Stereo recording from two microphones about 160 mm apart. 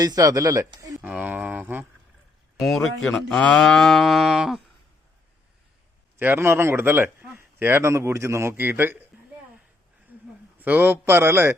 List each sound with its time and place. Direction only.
0.0 s speech: 20° right (ahead or behind)
1.0 s a sound: 10° right (ahead or behind)
2.6 s moo: centre (ahead or behind)
6.1 s a man's voice: 15° right (ahead or behind)
10.6 s a man's voice: 10° right (ahead or behind)